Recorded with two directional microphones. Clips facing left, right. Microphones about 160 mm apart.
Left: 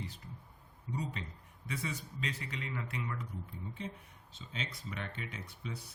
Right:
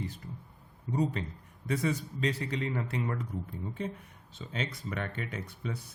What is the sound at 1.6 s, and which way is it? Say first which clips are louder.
A man's voice: right 10 dB; 40° right (ahead or behind).